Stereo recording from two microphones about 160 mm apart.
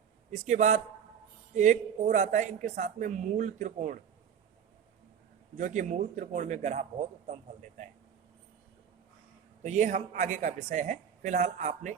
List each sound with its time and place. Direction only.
0.3 s a woman's voice: 50° right (ahead or behind)
5.5 s a woman's voice: 50° right (ahead or behind)
9.6 s a woman's voice: 50° right (ahead or behind)